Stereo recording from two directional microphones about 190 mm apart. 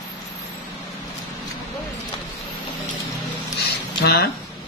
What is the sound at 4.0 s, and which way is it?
Speech, 60° left (ahead or behind).